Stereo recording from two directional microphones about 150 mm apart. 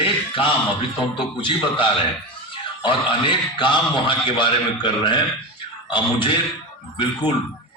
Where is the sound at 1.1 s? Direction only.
35° left (ahead or behind).